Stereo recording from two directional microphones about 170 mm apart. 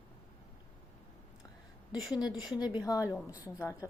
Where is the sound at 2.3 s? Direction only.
5° right (ahead or behind).